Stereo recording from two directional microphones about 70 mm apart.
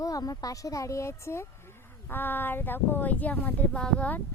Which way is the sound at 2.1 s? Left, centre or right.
Left.